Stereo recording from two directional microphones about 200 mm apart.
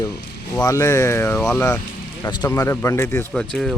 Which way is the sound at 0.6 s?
15° left (ahead or behind).